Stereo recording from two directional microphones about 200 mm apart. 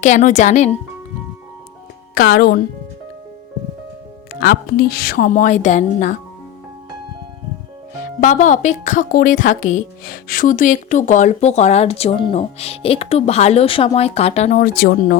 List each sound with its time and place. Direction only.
0.0 s a woman's voice: 35° left (ahead or behind)
2.3 s speech: 50° left (ahead or behind)
4.3 s a woman's voice: 45° left (ahead or behind)
8.2 s a woman's voice: 40° left (ahead or behind)
14.6 s speech: 50° left (ahead or behind)